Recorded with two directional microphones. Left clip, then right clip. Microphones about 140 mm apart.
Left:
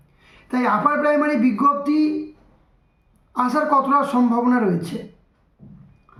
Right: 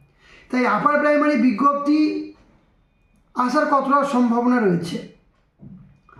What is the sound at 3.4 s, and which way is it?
A man's voice, 10° left (ahead or behind).